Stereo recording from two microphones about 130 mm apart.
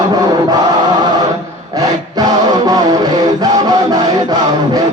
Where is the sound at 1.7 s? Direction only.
30° right (ahead or behind).